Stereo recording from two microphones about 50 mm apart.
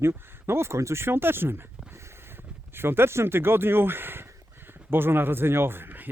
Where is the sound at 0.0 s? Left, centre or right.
Right.